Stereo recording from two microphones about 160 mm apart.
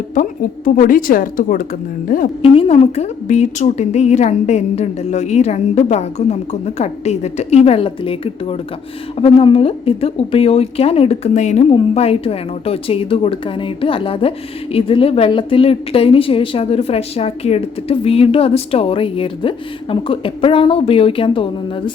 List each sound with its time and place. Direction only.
0.1 s a woman's voice: 60° left (ahead or behind)
2.4 s a woman's voice: 40° left (ahead or behind)